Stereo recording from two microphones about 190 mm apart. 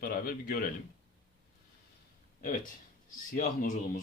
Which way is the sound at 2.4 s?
45° left (ahead or behind).